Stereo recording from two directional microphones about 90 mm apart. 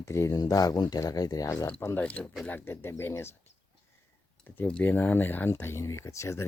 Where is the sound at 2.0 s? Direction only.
15° left (ahead or behind).